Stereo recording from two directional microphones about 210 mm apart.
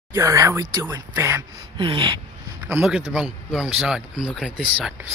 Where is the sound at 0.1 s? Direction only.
15° right (ahead or behind).